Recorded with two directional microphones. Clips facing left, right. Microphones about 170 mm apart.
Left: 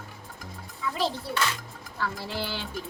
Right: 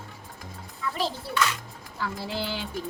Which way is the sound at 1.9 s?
15° right (ahead or behind).